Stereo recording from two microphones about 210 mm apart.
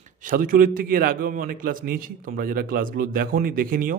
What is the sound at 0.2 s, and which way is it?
A man's voice, 40° right (ahead or behind).